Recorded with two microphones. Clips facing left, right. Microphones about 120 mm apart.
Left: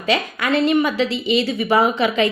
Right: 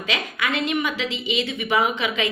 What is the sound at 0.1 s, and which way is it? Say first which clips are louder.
A woman's voice: left 7 dB; 40° left (ahead or behind).